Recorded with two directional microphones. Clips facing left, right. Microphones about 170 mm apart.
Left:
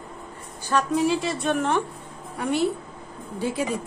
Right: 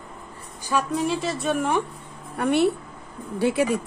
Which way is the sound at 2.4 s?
65° right (ahead or behind).